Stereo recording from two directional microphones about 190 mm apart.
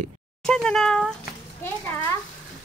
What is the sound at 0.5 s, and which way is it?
Speech, 5° left (ahead or behind).